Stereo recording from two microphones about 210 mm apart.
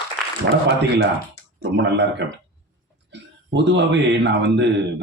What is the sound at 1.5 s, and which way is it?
A man's voice, 60° right (ahead or behind).